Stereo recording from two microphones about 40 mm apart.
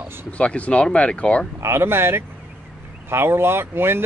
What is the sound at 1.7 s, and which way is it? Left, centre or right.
Speech, right.